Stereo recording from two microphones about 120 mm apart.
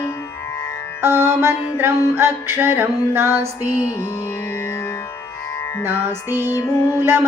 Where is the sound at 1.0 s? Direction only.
20° right (ahead or behind).